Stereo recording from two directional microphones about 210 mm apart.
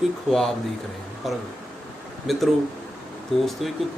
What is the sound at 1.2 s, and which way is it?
Speech, centre (ahead or behind).